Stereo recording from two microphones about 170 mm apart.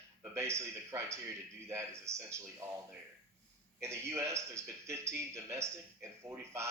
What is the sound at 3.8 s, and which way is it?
A man's voice, 15° right (ahead or behind).